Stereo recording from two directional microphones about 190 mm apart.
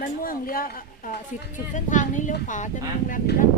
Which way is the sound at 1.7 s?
40° left (ahead or behind).